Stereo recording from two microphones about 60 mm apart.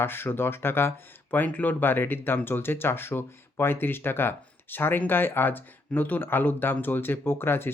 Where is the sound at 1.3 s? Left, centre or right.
Left.